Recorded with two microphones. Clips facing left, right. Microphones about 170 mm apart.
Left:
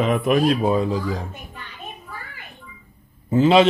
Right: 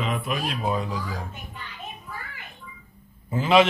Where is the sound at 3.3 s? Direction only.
30° left (ahead or behind).